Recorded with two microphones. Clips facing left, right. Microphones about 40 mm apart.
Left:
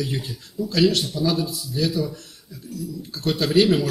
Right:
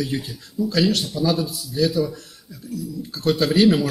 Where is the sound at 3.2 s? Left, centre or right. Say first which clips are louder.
Right 2 dB; centre.